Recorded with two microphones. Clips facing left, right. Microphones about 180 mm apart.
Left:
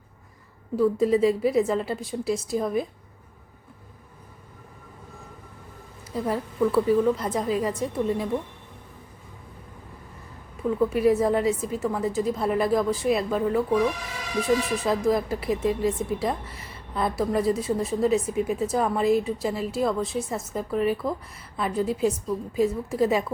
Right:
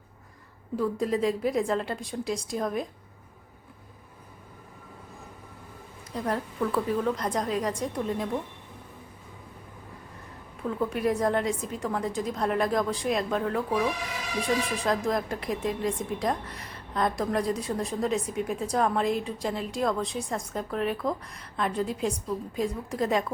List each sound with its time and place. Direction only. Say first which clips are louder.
0.8 s speech: left 6 dB; centre (ahead or behind)
6.1 s speech: left 3 dB; 5° left (ahead or behind)
10.6 s speech: left 6 dB; 5° left (ahead or behind)